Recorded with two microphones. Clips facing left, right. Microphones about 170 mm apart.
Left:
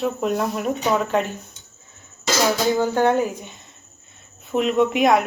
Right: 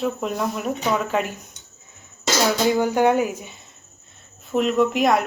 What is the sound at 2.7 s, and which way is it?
Speech, 10° right (ahead or behind).